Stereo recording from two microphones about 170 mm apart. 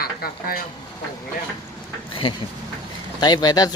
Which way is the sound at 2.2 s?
30° left (ahead or behind).